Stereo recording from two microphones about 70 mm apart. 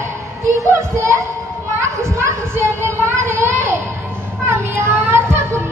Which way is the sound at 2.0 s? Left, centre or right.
Right.